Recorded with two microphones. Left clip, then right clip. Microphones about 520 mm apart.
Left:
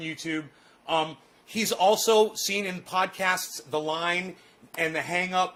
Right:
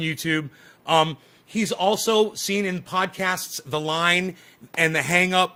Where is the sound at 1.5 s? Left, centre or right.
Right.